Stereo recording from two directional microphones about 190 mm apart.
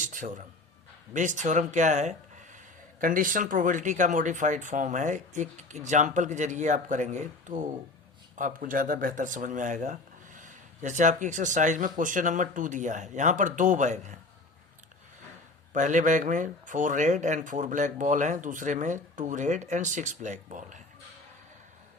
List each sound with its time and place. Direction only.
0.0 s a sound: 45° right (ahead or behind)
1.1 s speech: 40° right (ahead or behind)
15.7 s speech: 40° right (ahead or behind)